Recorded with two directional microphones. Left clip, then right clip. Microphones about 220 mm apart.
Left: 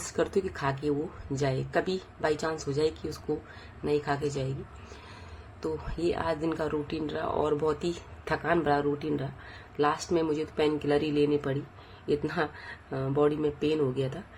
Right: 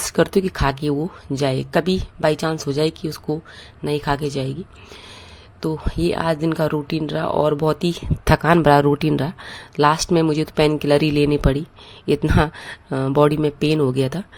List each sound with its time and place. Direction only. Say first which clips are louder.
0.2 s speech: right 10 dB; 45° right (ahead or behind)
5.6 s speech: right 8 dB; 45° right (ahead or behind)